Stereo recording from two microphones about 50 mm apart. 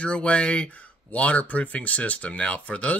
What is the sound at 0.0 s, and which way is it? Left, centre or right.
Speech, left.